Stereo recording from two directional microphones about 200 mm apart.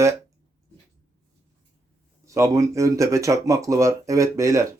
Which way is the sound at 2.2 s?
15° right (ahead or behind).